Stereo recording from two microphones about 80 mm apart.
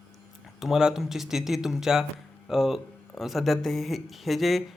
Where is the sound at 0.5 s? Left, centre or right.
Centre.